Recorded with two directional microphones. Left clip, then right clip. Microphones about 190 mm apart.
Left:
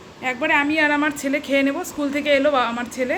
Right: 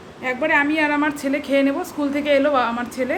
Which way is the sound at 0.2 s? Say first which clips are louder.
Right 1 dB; 5° left (ahead or behind).